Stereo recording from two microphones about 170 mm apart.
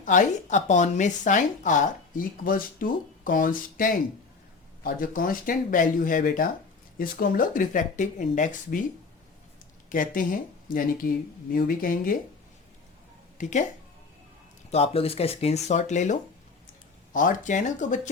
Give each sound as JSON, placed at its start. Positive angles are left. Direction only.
{"t": 0.0, "sound": "speech", "side_deg": 50}
{"t": 9.9, "sound": "speech", "side_deg": 50}
{"t": 11.5, "sound": "speech", "side_deg": 55}
{"t": 13.4, "sound": "speech", "side_deg": 45}
{"t": 14.7, "sound": "speech", "side_deg": 35}